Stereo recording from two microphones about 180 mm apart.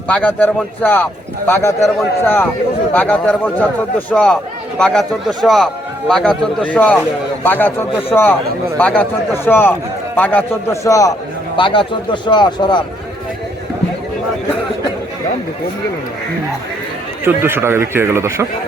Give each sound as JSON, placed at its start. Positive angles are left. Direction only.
{"t": 0.1, "sound": "a man's voice", "side_deg": 10}
{"t": 17.2, "sound": "a man's voice", "side_deg": -10}